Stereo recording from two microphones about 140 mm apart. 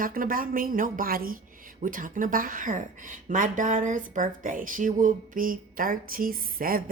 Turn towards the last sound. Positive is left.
turn(degrees=-90)